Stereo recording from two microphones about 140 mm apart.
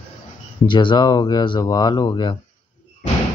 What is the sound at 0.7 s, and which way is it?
Speech, 35° left (ahead or behind).